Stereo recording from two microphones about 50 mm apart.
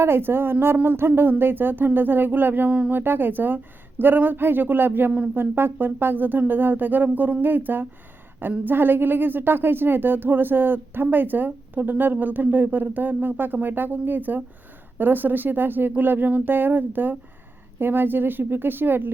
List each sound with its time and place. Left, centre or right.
0.0 s a woman's voice: right
2.6 s speech: right
2.9 s a woman's voice: right